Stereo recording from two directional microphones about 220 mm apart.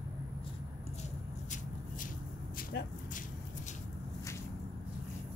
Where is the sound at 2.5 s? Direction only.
45° left (ahead or behind).